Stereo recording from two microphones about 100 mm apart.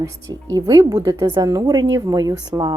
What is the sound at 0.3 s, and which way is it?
A woman's voice, 40° right (ahead or behind).